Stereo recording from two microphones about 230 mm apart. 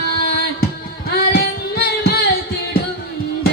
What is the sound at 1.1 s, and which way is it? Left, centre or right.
Music, left.